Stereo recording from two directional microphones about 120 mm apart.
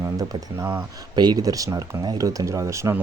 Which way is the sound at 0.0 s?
30° right (ahead or behind).